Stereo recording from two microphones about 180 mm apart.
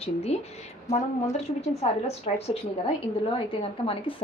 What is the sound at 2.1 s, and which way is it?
Speech, 35° left (ahead or behind).